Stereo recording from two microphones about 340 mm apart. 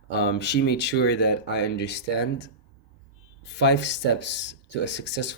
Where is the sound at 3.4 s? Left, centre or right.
Left.